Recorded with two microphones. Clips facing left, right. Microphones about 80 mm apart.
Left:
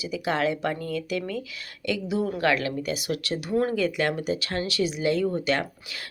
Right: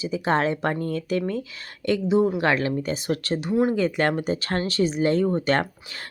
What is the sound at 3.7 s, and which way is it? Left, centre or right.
Speech, right.